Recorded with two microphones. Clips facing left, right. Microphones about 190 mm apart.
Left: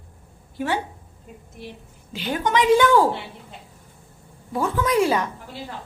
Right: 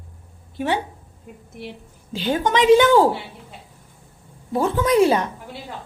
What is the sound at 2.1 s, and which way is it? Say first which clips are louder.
Speech: right 2 dB; 30° right (ahead or behind).